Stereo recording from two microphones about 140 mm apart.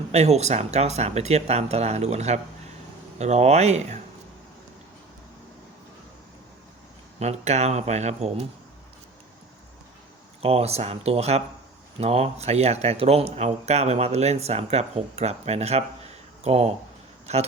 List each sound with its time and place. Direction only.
0.1 s speech: 50° right (ahead or behind)
7.2 s speech: 50° right (ahead or behind)
10.4 s speech: 45° right (ahead or behind)